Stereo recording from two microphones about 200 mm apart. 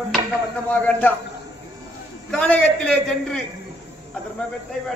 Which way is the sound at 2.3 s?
5° left (ahead or behind).